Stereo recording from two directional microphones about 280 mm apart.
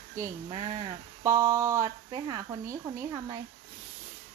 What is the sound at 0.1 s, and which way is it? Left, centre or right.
Speech, centre.